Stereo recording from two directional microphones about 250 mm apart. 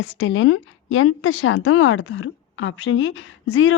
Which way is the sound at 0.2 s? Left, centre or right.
Left.